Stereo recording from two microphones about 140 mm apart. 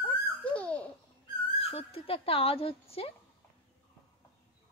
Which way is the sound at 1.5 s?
45° left (ahead or behind).